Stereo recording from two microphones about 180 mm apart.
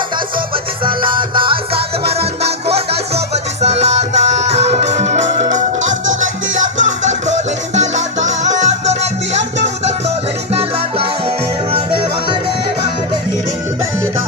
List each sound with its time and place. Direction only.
0.9 s music: 30° right (ahead or behind)